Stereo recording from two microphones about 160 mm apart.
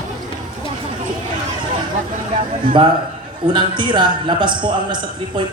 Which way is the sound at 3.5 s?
30° right (ahead or behind).